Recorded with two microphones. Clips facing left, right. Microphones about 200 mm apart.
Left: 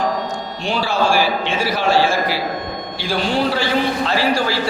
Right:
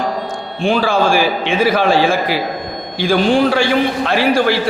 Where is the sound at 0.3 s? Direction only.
50° right (ahead or behind).